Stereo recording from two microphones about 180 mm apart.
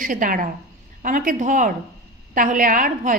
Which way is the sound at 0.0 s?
50° right (ahead or behind).